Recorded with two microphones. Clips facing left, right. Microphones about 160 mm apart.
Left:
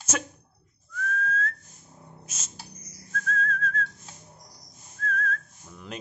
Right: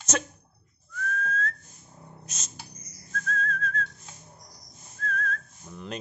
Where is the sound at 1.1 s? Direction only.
5° left (ahead or behind).